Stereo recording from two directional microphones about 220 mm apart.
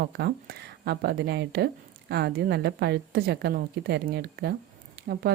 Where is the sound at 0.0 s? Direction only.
45° right (ahead or behind).